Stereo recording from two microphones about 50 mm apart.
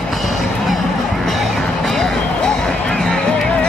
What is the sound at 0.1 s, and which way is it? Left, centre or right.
Music, centre.